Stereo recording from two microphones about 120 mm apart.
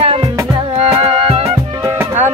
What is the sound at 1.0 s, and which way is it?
Music, 50° right (ahead or behind).